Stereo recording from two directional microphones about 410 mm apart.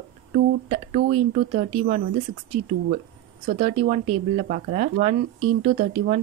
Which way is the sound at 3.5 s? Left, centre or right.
Centre.